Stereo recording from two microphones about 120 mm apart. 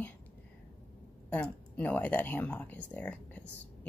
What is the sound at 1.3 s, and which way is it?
Speech, 10° left (ahead or behind).